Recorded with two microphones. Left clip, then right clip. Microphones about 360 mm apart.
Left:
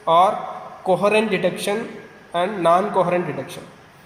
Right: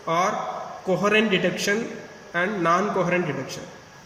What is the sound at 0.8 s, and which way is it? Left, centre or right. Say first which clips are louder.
A man's voice: left 4 dB; centre.